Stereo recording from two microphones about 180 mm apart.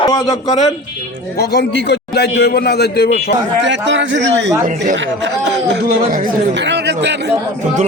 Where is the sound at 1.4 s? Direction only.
65° left (ahead or behind).